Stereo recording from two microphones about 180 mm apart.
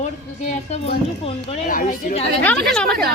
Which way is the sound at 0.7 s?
35° left (ahead or behind).